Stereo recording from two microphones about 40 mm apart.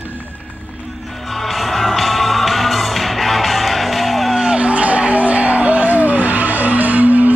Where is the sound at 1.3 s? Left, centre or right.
Centre.